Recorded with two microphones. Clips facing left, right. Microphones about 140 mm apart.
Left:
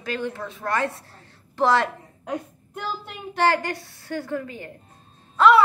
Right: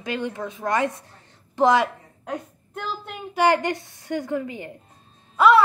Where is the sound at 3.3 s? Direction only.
20° right (ahead or behind).